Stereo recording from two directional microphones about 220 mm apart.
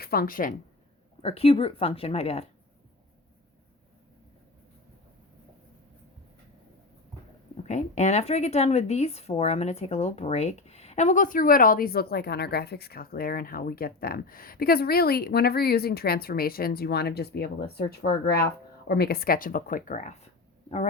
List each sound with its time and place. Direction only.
0.0 s speech: 45° left (ahead or behind)
1.2 s speech: 25° left (ahead or behind)
7.5 s speech: 35° left (ahead or behind)